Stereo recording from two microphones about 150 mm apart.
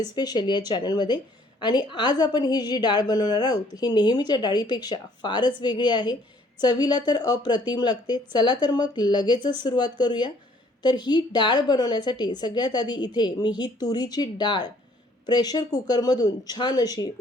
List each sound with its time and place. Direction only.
0.0 s a woman's voice: 25° left (ahead or behind)